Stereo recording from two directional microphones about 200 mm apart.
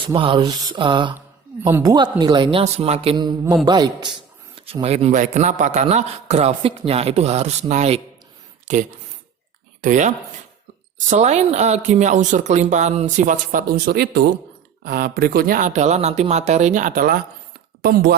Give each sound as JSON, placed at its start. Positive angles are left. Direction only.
{"t": 0.1, "sound": "speech", "side_deg": -25}
{"t": 9.8, "sound": "speech", "side_deg": -40}
{"t": 11.1, "sound": "speech", "side_deg": -35}